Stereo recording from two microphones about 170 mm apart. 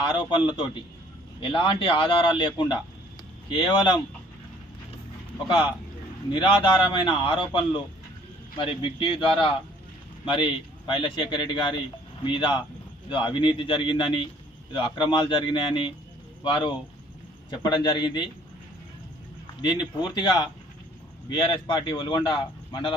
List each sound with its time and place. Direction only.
0.0 s a man's voice: 25° left (ahead or behind)
6.3 s a man's voice: 25° left (ahead or behind)
19.6 s a man's voice: 25° left (ahead or behind)